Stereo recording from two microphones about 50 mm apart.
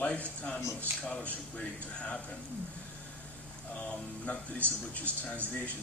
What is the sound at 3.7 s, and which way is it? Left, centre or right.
Speech, left.